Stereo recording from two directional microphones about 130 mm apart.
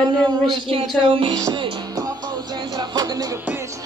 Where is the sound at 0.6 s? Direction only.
45° right (ahead or behind).